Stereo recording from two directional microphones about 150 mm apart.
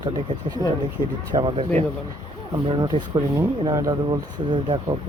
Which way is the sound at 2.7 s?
30° right (ahead or behind).